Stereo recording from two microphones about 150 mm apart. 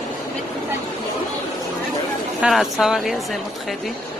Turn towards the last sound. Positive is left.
turn(degrees=0)  # may be behind; listen again after turning